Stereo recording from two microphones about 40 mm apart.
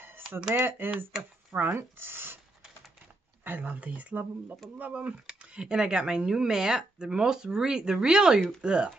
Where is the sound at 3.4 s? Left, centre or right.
Right.